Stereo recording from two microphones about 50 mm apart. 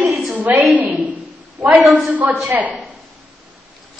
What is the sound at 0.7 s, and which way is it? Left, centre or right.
Speech, right.